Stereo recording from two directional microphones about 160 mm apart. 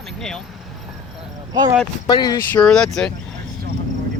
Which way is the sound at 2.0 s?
25° left (ahead or behind).